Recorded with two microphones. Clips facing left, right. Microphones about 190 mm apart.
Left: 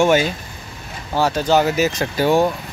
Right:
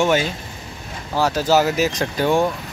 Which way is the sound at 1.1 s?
Centre (ahead or behind).